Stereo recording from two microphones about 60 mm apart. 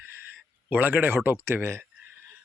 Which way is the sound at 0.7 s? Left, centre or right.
Right.